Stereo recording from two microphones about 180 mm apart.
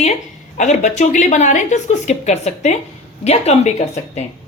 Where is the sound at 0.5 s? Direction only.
40° left (ahead or behind).